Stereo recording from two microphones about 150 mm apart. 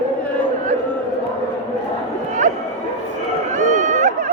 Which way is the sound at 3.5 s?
55° right (ahead or behind).